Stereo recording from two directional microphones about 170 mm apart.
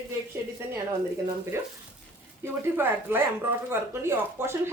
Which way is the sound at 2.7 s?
15° right (ahead or behind).